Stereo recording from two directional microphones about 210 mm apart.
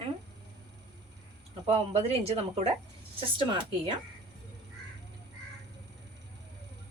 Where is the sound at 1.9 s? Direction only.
30° right (ahead or behind).